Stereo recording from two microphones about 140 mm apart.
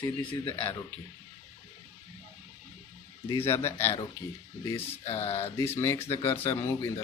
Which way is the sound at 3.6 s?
15° left (ahead or behind).